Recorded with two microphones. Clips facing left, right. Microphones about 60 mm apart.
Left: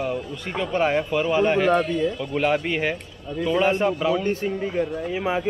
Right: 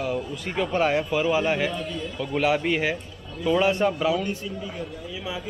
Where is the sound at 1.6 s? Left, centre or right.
Left.